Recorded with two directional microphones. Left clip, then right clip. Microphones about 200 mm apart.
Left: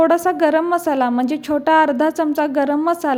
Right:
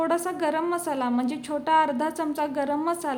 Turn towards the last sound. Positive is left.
turn(degrees=30)  # may be behind; listen again after turning